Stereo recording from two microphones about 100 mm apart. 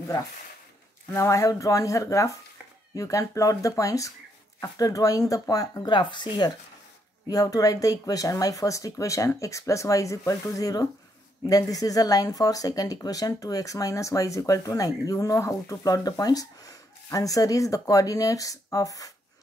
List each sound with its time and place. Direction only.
1.1 s speech: 30° left (ahead or behind)
5.9 s speech: 50° left (ahead or behind)
7.2 s speech: 35° left (ahead or behind)